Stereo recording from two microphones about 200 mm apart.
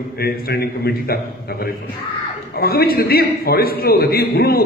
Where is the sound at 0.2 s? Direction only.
50° left (ahead or behind).